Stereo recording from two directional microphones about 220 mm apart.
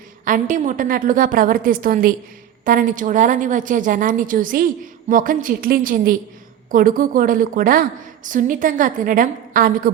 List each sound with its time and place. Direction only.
0.3 s a woman's voice: 35° right (ahead or behind)